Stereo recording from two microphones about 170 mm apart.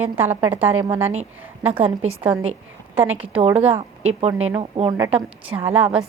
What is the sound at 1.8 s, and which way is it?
Speech, 35° right (ahead or behind).